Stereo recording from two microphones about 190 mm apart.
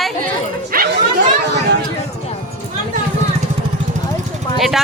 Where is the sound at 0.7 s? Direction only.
50° right (ahead or behind).